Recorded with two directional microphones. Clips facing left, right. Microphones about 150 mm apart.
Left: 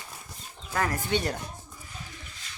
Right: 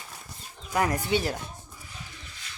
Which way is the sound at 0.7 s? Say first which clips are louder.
Right 3 dB; 15° right (ahead or behind).